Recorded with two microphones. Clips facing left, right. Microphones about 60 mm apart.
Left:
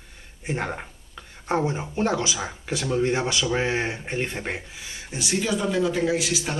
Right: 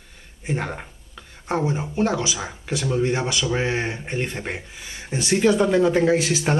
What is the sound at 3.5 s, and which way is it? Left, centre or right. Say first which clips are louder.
Speech: right 1 dB; centre.